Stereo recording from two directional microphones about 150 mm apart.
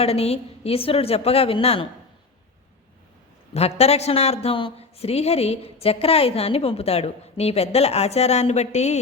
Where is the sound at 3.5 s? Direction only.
45° left (ahead or behind).